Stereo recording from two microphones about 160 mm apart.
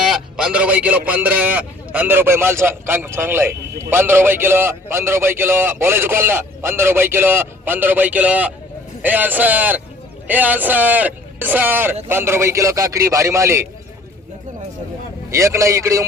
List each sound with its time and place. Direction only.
0.0 s a man's voice: 5° right (ahead or behind)
15.3 s a man's voice: 20° right (ahead or behind)